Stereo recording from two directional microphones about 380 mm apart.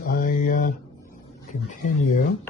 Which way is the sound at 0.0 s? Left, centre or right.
Left.